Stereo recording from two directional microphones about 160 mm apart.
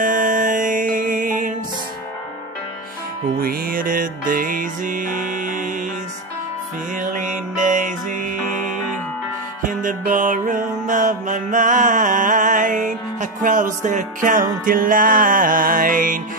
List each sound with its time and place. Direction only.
0.0 s music: 55° right (ahead or behind)
3.3 s music: 65° right (ahead or behind)
7.0 s music: 55° right (ahead or behind)
9.6 s music: 55° right (ahead or behind)